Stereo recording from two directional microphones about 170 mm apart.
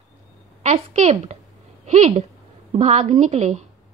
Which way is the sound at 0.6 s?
40° right (ahead or behind).